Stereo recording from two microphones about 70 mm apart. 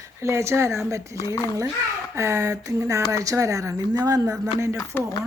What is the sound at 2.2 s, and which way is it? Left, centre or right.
Speech, right.